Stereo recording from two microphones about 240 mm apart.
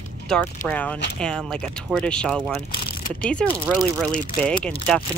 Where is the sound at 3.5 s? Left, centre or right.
Centre.